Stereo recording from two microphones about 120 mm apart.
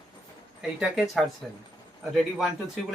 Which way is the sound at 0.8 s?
5° right (ahead or behind).